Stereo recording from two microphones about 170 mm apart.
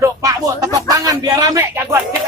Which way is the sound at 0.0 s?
20° right (ahead or behind).